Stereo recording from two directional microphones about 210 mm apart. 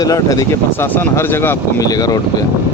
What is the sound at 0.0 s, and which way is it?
Speech, 15° left (ahead or behind).